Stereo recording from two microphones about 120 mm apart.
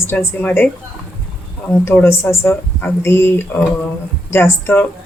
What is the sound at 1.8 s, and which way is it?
Speech, 20° left (ahead or behind).